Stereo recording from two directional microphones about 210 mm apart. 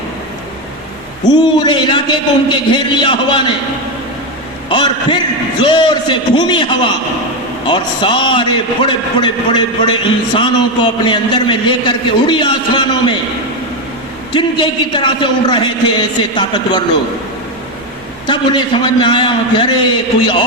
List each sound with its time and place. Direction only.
1.3 s a man's voice: 20° left (ahead or behind)
4.7 s a man's voice: 20° left (ahead or behind)
14.3 s a man's voice: 20° left (ahead or behind)
18.3 s a man's voice: 20° left (ahead or behind)